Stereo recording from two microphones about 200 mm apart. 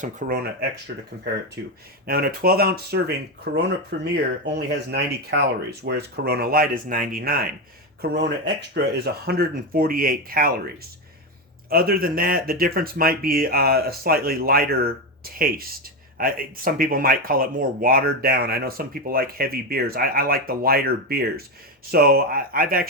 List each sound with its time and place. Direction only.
0.0 s speech: 45° right (ahead or behind)
2.0 s speech: 50° right (ahead or behind)
8.8 s speech: 60° right (ahead or behind)
9.2 s speech: 50° right (ahead or behind)
11.7 s speech: 50° right (ahead or behind)